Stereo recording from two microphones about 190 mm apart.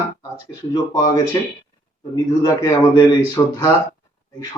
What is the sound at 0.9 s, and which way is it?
A man's voice, 20° left (ahead or behind).